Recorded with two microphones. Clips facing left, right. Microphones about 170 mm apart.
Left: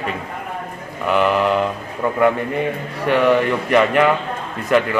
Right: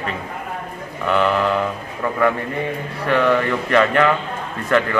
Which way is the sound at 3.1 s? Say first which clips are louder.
Left 2 dB; 15° left (ahead or behind).